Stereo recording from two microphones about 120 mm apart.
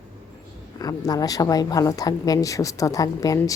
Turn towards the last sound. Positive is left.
turn(degrees=30)  # may be behind; listen again after turning